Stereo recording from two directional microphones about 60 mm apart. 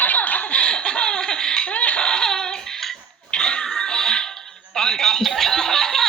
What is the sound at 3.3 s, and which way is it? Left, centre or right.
Music, centre.